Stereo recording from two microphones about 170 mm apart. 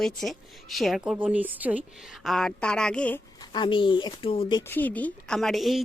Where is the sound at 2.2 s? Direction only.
Centre (ahead or behind).